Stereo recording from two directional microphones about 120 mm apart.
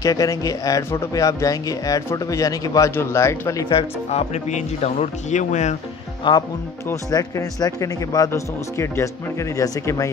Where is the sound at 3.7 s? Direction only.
55° left (ahead or behind); by 5.7 s 80° left.